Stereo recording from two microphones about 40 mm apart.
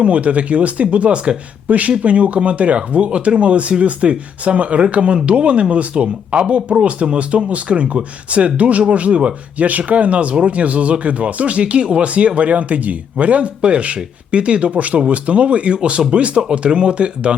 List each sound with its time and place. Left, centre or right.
0.0 s speech: right
1.6 s speech: right